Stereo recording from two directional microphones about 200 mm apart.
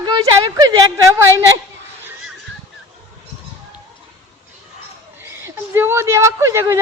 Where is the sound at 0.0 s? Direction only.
20° right (ahead or behind).